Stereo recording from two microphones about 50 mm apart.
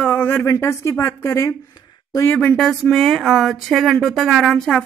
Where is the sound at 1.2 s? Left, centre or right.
Left.